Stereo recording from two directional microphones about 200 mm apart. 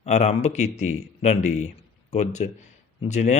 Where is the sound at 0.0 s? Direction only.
35° left (ahead or behind).